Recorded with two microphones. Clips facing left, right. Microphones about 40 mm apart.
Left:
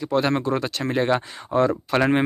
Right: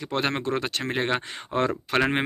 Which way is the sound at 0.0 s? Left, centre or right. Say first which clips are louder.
Left 5 dB; right.